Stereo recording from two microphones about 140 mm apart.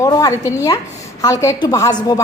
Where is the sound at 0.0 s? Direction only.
25° left (ahead or behind).